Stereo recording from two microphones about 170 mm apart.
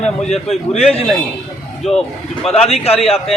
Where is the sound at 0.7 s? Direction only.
35° left (ahead or behind).